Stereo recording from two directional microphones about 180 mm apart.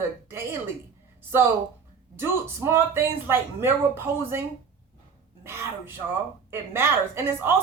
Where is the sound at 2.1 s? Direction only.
15° right (ahead or behind).